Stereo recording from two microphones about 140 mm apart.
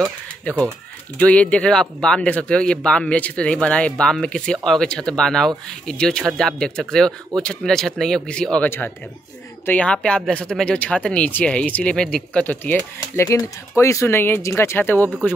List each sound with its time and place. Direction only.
1.2 s speech: 10° left (ahead or behind)
13.1 s speech: 20° left (ahead or behind)